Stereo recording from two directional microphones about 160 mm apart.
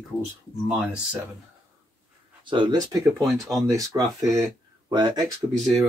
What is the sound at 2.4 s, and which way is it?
Speech, 30° right (ahead or behind).